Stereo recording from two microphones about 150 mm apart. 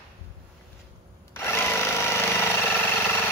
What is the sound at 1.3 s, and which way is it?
Tools, 15° left (ahead or behind).